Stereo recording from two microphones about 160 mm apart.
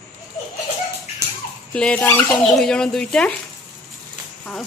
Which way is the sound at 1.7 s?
10° left (ahead or behind).